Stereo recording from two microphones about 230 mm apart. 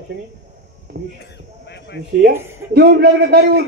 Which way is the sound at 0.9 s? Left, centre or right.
Right.